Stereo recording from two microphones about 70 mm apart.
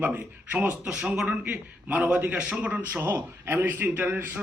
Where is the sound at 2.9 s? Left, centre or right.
Right.